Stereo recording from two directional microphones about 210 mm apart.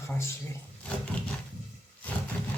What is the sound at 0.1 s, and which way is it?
Speech, 15° left (ahead or behind).